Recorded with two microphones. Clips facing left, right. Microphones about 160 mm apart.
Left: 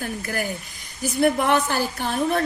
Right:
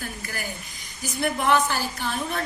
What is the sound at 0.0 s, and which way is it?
A woman's voice, 50° left (ahead or behind).